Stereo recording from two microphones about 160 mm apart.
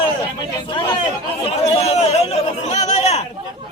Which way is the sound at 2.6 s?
45° left (ahead or behind).